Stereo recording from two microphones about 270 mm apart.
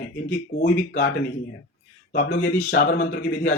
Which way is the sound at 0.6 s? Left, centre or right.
Left.